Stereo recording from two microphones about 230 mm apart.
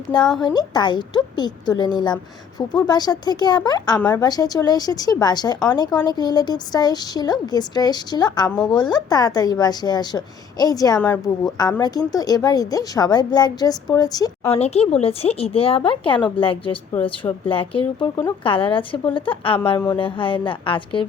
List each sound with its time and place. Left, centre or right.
0.3 s a woman's voice: centre
8.4 s speech: centre
8.7 s a woman's voice: centre
14.6 s a woman's voice: left